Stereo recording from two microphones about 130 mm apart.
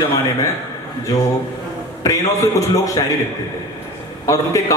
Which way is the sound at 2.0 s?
25° left (ahead or behind).